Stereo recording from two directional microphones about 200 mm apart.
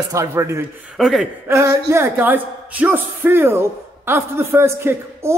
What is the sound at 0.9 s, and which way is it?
Speech, centre (ahead or behind).